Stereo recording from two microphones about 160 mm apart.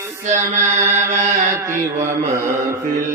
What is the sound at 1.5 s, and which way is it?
Mantra, 15° right (ahead or behind).